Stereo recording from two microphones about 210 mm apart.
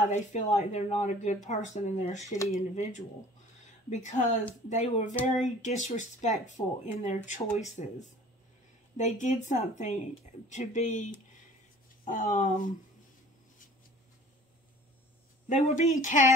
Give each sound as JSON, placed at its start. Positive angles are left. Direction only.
{"t": 0.0, "sound": "speech", "side_deg": 35}
{"t": 15.4, "sound": "speech", "side_deg": 35}